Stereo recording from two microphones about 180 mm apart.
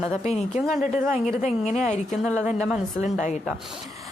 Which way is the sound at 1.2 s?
40° left (ahead or behind).